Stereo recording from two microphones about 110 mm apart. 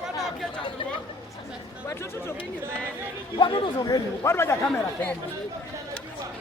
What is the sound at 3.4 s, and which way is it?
Speech, 45° left (ahead or behind).